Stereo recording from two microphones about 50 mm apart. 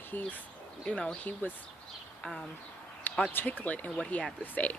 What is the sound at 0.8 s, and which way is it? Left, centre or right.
Speech, left.